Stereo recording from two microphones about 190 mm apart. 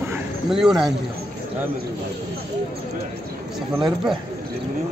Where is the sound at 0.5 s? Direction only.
Centre (ahead or behind).